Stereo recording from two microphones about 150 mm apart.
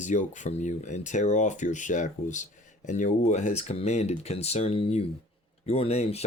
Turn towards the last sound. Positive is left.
turn(degrees=45)  # may be behind; listen again after turning